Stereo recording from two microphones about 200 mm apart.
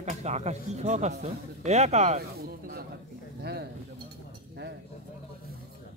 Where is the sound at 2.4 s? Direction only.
50° right (ahead or behind).